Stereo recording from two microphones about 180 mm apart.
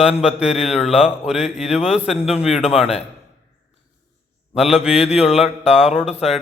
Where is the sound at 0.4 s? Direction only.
35° left (ahead or behind).